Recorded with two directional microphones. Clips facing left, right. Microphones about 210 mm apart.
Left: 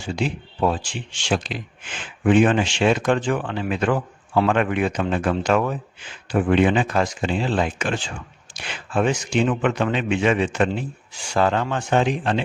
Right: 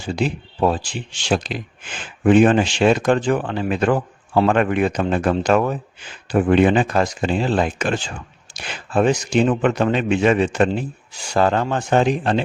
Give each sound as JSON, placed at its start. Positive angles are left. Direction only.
{"t": 0.0, "sound": "speech", "side_deg": -40}